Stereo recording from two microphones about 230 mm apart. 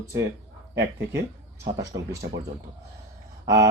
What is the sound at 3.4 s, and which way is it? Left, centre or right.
Speech, centre.